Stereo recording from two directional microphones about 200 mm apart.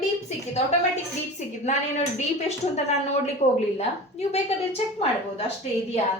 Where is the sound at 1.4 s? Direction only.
35° left (ahead or behind).